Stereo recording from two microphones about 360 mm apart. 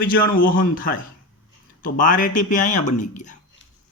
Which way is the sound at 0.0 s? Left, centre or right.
Left.